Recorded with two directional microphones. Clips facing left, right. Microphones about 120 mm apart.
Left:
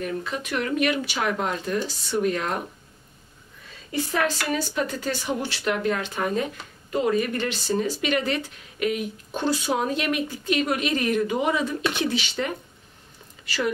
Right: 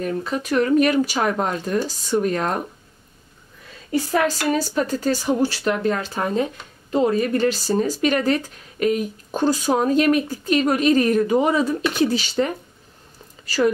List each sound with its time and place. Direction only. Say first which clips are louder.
0.0 s speech: right 5 dB; 40° right (ahead or behind)
3.9 s speech: right 5 dB; 40° right (ahead or behind)
13.5 s speech: right 8 dB; 40° right (ahead or behind)